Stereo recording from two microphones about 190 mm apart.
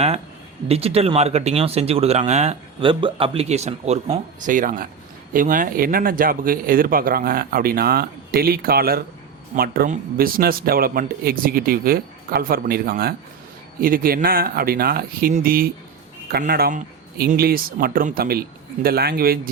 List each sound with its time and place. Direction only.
0.7 s speech: 30° right (ahead or behind); by 19.4 s 50° right (ahead or behind)